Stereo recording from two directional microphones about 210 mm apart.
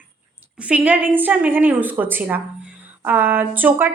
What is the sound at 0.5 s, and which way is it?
A woman's voice, 5° right (ahead or behind).